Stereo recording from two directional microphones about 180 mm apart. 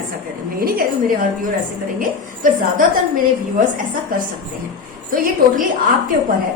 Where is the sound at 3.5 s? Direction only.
50° right (ahead or behind).